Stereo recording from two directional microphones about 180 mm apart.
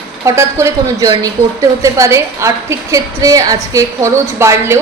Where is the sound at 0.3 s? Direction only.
15° right (ahead or behind).